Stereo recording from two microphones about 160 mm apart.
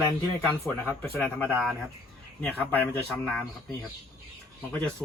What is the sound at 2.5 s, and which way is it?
Speech, 10° left (ahead or behind).